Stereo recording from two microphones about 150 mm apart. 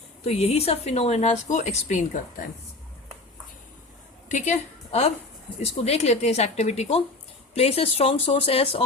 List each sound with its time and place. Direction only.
0.3 s speech: 45° left (ahead or behind)
4.3 s a woman's voice: 55° left (ahead or behind)